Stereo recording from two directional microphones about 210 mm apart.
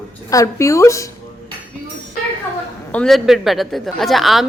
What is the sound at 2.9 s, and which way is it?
A woman's voice, centre (ahead or behind).